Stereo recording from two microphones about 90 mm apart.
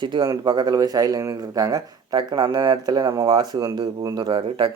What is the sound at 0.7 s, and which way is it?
Speech, 45° right (ahead or behind).